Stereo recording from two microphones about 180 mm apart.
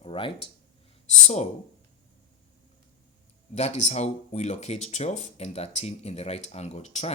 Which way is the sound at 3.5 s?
40° left (ahead or behind).